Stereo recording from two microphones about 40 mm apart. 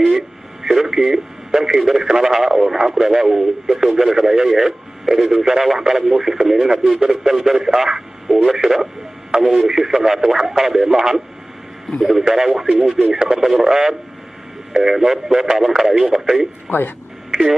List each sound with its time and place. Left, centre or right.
0.0 s radio: centre
2.1 s speech: centre
9.6 s speech: centre
11.9 s speech: centre
16.6 s speech: left